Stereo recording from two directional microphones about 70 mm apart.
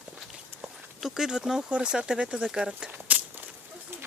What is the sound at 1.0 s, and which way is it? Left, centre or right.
Speech, centre.